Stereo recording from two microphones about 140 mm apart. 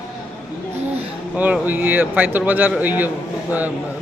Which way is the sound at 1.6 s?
15° right (ahead or behind).